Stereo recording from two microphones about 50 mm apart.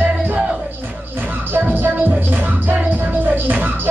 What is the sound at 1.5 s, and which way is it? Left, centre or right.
Music, right.